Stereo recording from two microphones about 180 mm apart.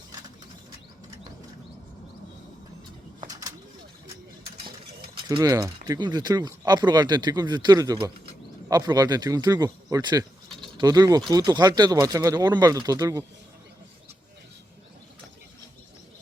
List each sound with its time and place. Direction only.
3.2 s bird: 20° right (ahead or behind)
5.1 s speech: 25° right (ahead or behind)
10.6 s a sound: 25° right (ahead or behind)
11.3 s speech: 20° right (ahead or behind)